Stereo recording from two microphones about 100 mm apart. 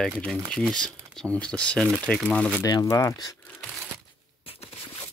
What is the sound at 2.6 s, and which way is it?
Speech, 35° left (ahead or behind).